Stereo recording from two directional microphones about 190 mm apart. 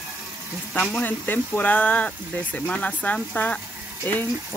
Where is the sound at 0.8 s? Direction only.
10° left (ahead or behind).